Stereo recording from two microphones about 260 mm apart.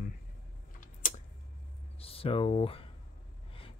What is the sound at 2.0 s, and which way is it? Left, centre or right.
Speech, left.